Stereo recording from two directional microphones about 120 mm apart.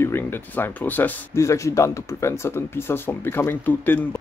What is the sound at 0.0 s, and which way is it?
Speech, 20° left (ahead or behind).